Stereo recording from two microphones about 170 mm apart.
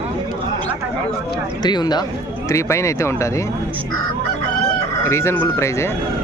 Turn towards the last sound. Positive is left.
turn(degrees=15)  # may be behind; listen again after turning